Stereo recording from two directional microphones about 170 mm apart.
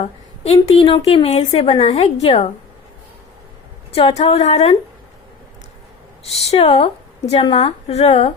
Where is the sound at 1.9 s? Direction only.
40° left (ahead or behind).